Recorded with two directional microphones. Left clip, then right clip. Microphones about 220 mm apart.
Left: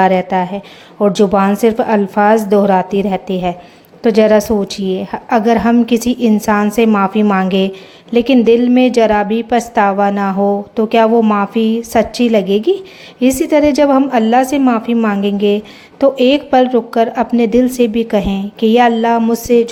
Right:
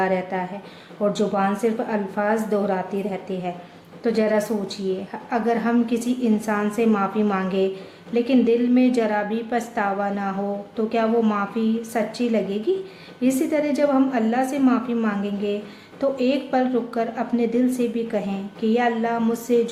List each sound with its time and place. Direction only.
0.0 s a woman's voice: 35° left (ahead or behind)